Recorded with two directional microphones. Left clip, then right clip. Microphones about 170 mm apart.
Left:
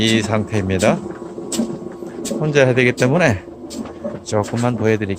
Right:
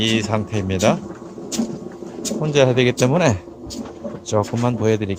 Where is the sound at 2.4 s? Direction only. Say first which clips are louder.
Left 2 dB; 10° right (ahead or behind).